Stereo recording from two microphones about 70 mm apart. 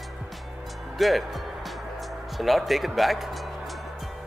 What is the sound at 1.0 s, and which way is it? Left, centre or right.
Speech, centre.